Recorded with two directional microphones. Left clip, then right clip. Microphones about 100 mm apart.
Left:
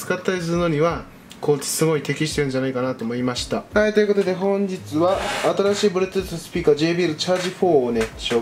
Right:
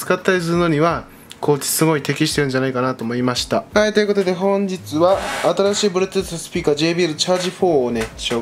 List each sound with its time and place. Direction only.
0.1 s speech: 45° right (ahead or behind)
3.7 s speech: 35° right (ahead or behind)